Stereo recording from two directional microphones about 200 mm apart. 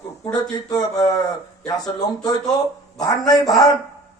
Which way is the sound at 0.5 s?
20° left (ahead or behind).